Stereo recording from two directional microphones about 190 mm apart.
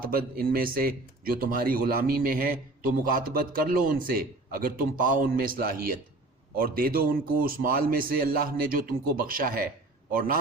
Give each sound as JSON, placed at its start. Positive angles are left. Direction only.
{"t": 0.0, "sound": "a man's voice", "side_deg": -50}